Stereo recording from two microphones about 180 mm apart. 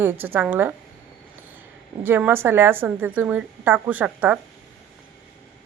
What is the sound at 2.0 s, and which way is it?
A woman's voice, 10° right (ahead or behind).